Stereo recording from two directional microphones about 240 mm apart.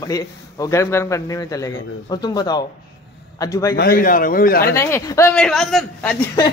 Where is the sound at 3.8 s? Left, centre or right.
Left.